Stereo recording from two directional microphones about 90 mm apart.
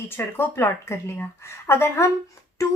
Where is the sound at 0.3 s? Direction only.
30° left (ahead or behind).